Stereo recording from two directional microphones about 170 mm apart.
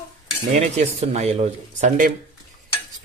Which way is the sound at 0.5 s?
40° right (ahead or behind).